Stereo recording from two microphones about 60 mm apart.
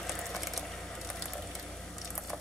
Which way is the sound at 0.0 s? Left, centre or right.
Centre.